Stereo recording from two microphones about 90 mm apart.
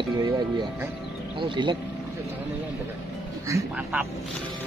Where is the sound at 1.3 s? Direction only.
65° right (ahead or behind).